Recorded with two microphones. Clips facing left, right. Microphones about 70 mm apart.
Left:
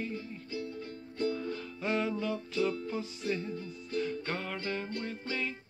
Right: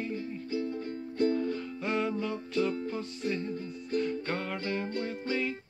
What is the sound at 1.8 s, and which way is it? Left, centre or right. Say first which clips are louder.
Music: even; centre.